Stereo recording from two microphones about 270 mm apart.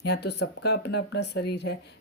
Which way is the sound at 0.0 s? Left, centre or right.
Left.